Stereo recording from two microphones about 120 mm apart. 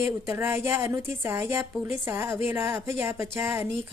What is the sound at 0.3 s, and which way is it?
A woman's voice, 20° right (ahead or behind).